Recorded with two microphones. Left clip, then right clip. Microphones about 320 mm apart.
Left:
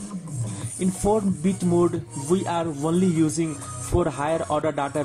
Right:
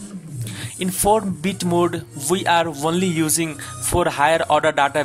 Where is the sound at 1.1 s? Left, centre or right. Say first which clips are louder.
Right 5 dB; right.